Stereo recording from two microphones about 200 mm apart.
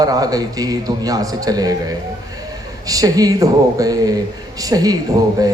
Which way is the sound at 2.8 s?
20° right (ahead or behind).